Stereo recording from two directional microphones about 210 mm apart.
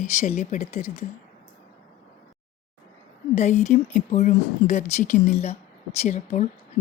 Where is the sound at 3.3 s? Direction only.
30° left (ahead or behind).